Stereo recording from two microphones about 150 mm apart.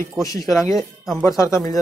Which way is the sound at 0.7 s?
Centre (ahead or behind).